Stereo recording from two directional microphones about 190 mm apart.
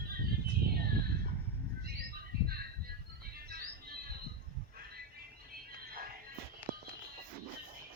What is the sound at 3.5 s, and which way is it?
Music, 55° right (ahead or behind).